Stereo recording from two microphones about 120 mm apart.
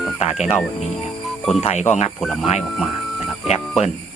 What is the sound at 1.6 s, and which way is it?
Speech, 65° left (ahead or behind).